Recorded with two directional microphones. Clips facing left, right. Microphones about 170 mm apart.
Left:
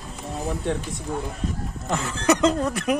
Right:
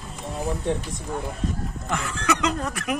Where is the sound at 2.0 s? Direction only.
35° left (ahead or behind).